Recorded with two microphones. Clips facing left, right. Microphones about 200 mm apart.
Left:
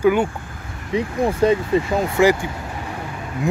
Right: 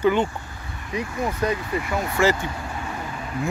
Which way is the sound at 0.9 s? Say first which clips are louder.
Left 7 dB; 30° left (ahead or behind).